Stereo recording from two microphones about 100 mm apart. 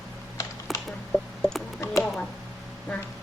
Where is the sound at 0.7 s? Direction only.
Centre (ahead or behind).